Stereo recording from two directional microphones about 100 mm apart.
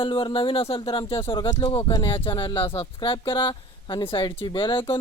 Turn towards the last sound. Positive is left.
turn(degrees=55)  # may be behind; listen again after turning